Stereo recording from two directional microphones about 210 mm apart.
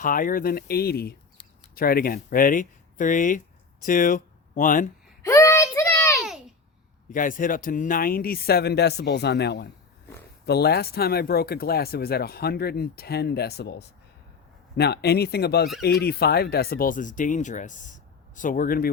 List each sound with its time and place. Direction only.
0.0 s speech: 40° left (ahead or behind)
5.2 s a sound: 15° left (ahead or behind)
7.1 s speech: 40° left (ahead or behind)